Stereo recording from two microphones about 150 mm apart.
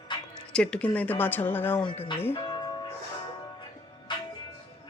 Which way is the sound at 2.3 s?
30° left (ahead or behind).